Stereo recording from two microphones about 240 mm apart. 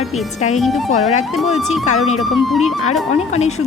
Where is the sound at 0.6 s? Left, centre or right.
Centre.